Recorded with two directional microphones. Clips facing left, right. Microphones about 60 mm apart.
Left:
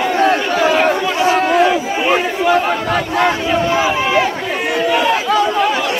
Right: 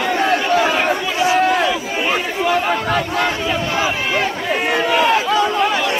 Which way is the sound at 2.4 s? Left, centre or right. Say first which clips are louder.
Left 3 dB; centre.